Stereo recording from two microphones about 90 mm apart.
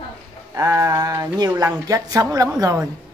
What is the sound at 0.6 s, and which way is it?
Speech, 35° right (ahead or behind).